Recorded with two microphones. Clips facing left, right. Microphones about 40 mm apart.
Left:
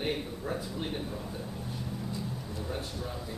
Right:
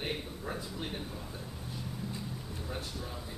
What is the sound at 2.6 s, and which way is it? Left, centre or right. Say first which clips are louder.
Speech: left 3 dB; centre.